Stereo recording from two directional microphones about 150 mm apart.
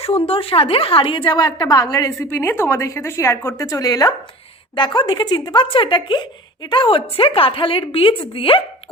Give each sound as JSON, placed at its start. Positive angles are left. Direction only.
{"t": 0.0, "sound": "a woman's voice", "side_deg": 40}